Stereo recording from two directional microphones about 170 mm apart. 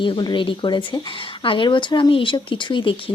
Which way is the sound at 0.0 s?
30° left (ahead or behind).